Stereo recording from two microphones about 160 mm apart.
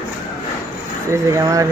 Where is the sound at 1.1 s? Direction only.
20° right (ahead or behind).